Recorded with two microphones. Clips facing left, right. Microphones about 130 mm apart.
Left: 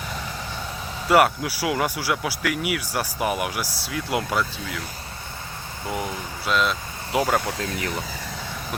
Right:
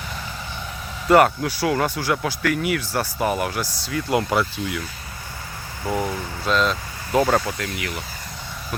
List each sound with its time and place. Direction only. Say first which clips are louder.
1.0 s speech: right 3 dB; 5° left (ahead or behind)
6.4 s speech: right 2 dB; 5° left (ahead or behind)
7.6 s speech: left 1 dB; 35° left (ahead or behind)